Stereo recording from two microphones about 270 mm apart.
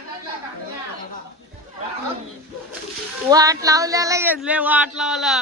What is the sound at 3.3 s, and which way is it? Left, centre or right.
Speech, centre.